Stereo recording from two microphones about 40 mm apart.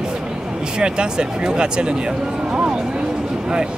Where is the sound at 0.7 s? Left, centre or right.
Right.